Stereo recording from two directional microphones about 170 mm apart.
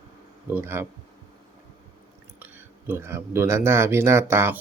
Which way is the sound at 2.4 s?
10° right (ahead or behind).